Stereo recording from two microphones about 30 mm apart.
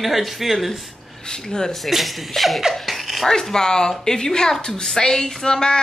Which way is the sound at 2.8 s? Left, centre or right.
Centre.